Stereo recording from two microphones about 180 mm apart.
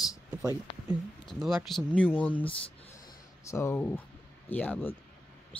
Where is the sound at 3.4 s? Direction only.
15° left (ahead or behind).